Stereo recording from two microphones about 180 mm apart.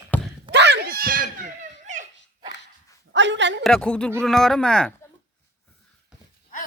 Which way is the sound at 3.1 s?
90° right.